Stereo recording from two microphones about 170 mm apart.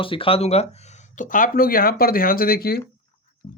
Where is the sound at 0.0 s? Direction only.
30° left (ahead or behind); by 2.8 s 65° left (ahead or behind).